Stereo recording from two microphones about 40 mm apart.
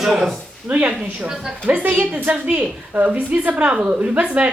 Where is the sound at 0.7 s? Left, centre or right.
Right.